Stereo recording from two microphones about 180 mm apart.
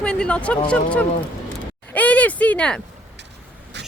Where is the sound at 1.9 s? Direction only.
10° left (ahead or behind).